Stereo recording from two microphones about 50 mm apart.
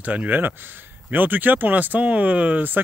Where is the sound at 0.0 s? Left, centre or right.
Right.